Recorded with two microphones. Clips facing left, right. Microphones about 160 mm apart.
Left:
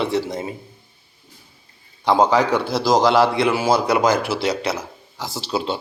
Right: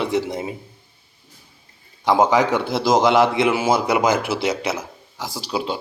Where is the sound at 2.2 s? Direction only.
20° right (ahead or behind).